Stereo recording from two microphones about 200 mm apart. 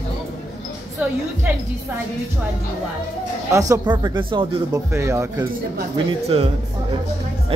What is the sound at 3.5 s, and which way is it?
Speech, 15° right (ahead or behind).